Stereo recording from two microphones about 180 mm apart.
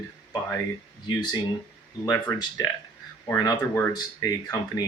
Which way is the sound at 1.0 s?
25° left (ahead or behind).